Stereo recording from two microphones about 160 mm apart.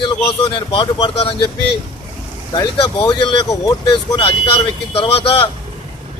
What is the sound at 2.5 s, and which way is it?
Speech, 30° left (ahead or behind).